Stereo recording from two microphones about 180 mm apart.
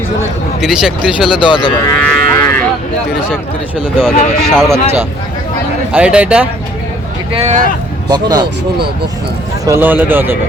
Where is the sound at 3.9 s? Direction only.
5° left (ahead or behind).